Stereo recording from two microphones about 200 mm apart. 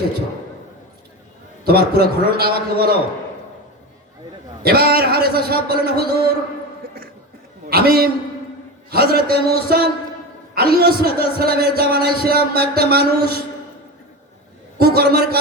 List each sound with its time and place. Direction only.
1.6 s a man's voice: 50° right (ahead or behind)
4.6 s a man's voice: 50° right (ahead or behind)
7.7 s a man's voice: 50° right (ahead or behind)
14.8 s a man's voice: 50° right (ahead or behind)